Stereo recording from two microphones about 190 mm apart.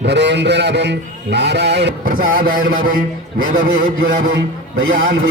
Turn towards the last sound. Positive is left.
turn(degrees=-90)